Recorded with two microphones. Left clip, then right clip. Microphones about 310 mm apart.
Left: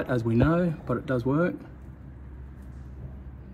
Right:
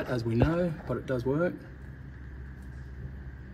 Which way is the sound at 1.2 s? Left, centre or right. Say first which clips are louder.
Left 1 dB; left.